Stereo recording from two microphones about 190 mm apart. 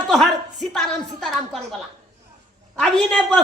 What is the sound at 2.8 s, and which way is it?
Speech, 5° left (ahead or behind).